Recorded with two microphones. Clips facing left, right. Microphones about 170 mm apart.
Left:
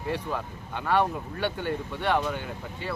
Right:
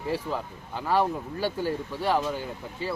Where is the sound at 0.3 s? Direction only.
30° right (ahead or behind).